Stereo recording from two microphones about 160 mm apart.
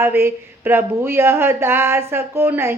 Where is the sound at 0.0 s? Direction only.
15° right (ahead or behind).